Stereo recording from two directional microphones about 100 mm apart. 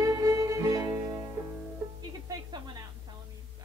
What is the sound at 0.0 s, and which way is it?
Music, 35° right (ahead or behind).